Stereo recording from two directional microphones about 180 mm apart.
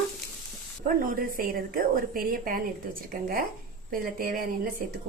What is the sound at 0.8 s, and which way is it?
A woman's voice, 50° right (ahead or behind).